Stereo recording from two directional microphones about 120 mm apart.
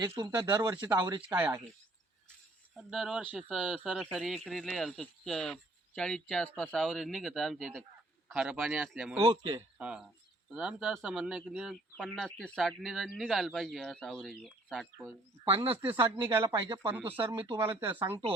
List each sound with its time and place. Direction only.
0.3 s speech: 35° right (ahead or behind)
2.7 s speech: 5° right (ahead or behind)
6.8 s speech: centre (ahead or behind)
9.2 s speech: 50° right (ahead or behind)
9.7 s speech: 10° right (ahead or behind)
11.9 s speech: 5° left (ahead or behind)
15.4 s speech: 45° right (ahead or behind)
16.3 s speech: 20° right (ahead or behind)
16.6 s speech: 40° right (ahead or behind)
16.9 s speech: 15° right (ahead or behind)
17.2 s speech: 45° right (ahead or behind)
17.6 s speech: 20° right (ahead or behind)